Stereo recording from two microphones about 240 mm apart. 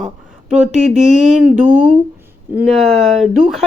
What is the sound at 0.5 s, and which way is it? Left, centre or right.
Speech, right.